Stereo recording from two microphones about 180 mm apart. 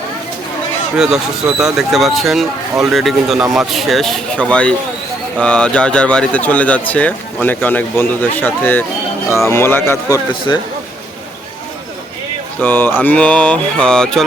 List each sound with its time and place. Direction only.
0.9 s speech: 5° right (ahead or behind); by 10.2 s 15° left (ahead or behind)
12.5 s speech: 10° left (ahead or behind)